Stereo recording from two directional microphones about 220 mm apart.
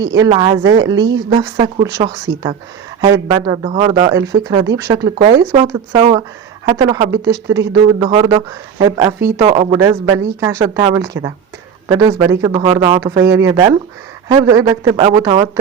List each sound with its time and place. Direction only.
0.0 s speech: 15° right (ahead or behind)
9.7 s speech: 15° right (ahead or behind)